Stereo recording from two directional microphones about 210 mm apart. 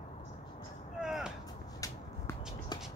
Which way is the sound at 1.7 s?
15° left (ahead or behind).